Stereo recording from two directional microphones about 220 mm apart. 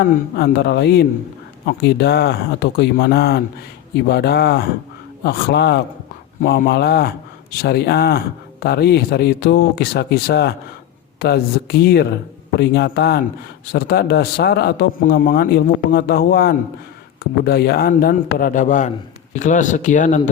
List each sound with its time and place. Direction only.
0.0 s a man's voice: 45° left (ahead or behind)